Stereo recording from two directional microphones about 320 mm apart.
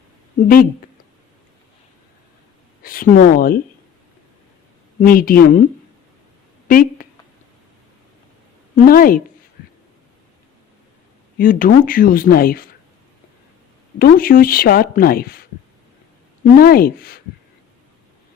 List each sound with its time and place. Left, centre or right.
0.3 s a woman's voice: left
2.8 s speech: left
4.9 s a woman's voice: left
6.7 s speech: left
8.7 s a woman's voice: left
11.3 s a woman's voice: left
14.0 s a woman's voice: left